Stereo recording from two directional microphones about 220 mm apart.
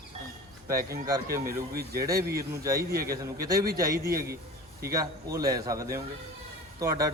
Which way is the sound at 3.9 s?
45° right (ahead or behind).